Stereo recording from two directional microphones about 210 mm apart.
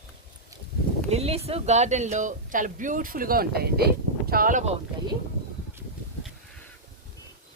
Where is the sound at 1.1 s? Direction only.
30° right (ahead or behind).